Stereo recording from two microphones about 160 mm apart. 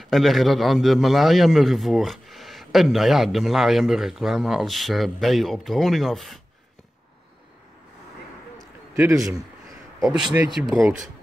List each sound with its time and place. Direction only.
0.0 s a man's voice: centre (ahead or behind)
8.9 s speech: 15° right (ahead or behind)
10.3 s speech: 10° right (ahead or behind)